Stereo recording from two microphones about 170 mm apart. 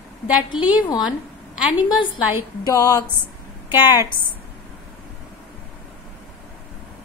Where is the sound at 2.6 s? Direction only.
20° left (ahead or behind).